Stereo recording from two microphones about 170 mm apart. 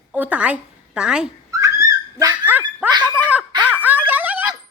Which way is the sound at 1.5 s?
20° right (ahead or behind).